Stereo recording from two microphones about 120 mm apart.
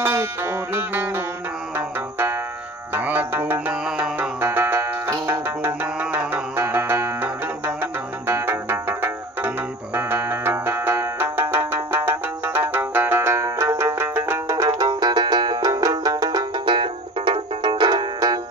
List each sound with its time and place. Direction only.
0.0 s music: 20° right (ahead or behind); by 18.4 s 35° right (ahead or behind)